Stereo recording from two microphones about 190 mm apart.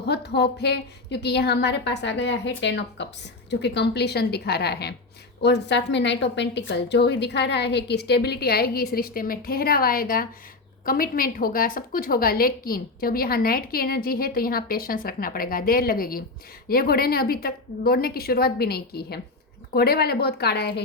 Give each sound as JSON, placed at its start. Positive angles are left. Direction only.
{"t": 0.0, "sound": "a woman's voice", "side_deg": 60}